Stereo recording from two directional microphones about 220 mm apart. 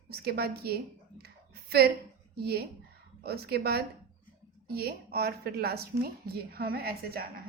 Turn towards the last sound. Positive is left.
turn(degrees=-45)  # may be behind; listen again after turning